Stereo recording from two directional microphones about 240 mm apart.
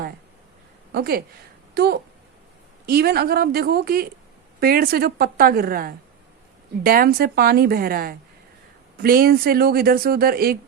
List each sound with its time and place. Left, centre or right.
0.9 s speech: right